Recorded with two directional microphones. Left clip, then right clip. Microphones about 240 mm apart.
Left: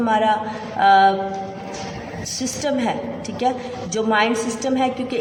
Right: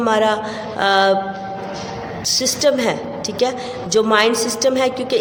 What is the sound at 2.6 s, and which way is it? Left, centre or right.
Speech, right.